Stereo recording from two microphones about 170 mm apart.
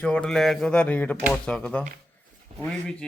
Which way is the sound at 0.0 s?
5° left (ahead or behind).